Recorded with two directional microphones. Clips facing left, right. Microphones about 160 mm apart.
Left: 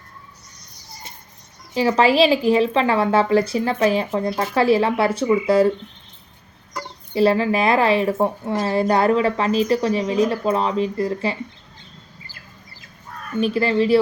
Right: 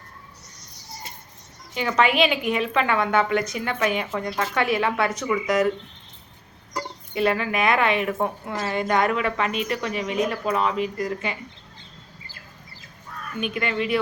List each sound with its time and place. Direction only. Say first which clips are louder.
1.7 s speech: left 5 dB; 35° left (ahead or behind)
7.1 s speech: left 6 dB; 30° left (ahead or behind)
13.3 s speech: left 8 dB; 30° left (ahead or behind)